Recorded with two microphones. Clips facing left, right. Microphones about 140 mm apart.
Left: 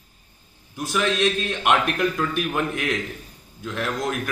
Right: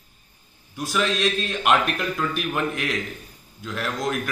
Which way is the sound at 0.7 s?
20° left (ahead or behind).